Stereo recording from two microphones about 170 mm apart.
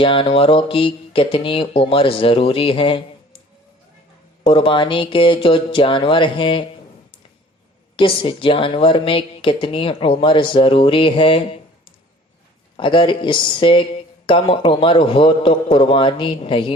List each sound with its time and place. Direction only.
0.0 s speech: 30° left (ahead or behind)
4.4 s a man's voice: 30° left (ahead or behind)
7.9 s speech: 30° left (ahead or behind)
12.7 s a man's voice: 30° left (ahead or behind)